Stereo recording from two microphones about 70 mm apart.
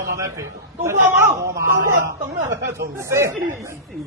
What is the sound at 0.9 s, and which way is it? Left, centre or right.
Speech, right.